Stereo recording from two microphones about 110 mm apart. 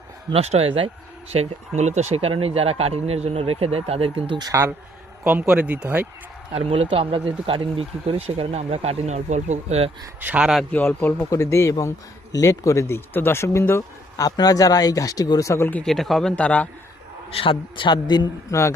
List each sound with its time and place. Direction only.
0.3 s speech: 65° right (ahead or behind)
1.3 s speech: 80° right; by 4.4 s 55° right (ahead or behind)
5.2 s a man's voice: 10° right (ahead or behind)
6.5 s speech: 60° right (ahead or behind); by 9.9 s 80° right
10.2 s a man's voice: 15° right (ahead or behind)
10.7 s speech: 20° left (ahead or behind)
14.3 s speech: 35° left (ahead or behind)
15.8 s a man's voice: 5° left (ahead or behind)
16.3 s a man's voice: 10° left (ahead or behind)
17.3 s a man's voice: 50° left (ahead or behind)